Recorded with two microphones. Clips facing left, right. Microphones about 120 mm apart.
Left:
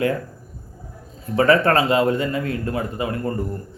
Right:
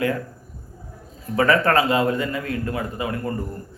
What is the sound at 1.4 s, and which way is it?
A man's voice, 30° left (ahead or behind).